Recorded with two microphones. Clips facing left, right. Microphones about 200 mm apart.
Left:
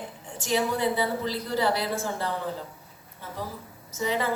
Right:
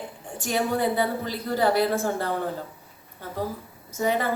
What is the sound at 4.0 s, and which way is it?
Speech, 50° right (ahead or behind).